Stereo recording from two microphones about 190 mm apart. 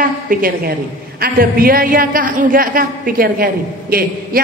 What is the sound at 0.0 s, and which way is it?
A woman's voice, 50° right (ahead or behind).